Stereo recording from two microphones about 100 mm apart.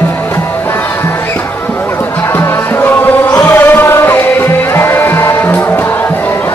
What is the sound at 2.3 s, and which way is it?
Music, 25° left (ahead or behind).